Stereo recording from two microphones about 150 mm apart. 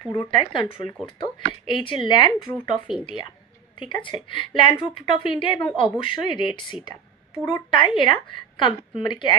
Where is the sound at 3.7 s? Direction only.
35° left (ahead or behind).